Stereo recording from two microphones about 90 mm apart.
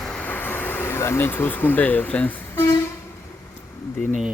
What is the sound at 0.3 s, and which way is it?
Speech, 20° left (ahead or behind).